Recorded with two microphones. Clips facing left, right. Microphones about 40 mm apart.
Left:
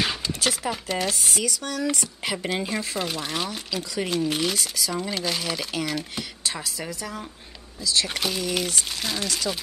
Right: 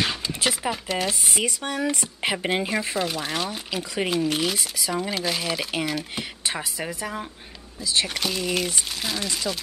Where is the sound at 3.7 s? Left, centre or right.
Right.